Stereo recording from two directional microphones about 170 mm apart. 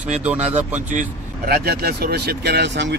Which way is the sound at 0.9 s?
55° right (ahead or behind).